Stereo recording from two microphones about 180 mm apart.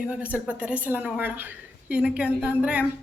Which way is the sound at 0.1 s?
5° right (ahead or behind).